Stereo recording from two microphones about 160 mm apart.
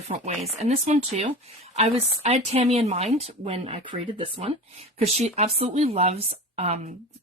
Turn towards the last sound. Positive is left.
turn(degrees=-45)  # may be behind; listen again after turning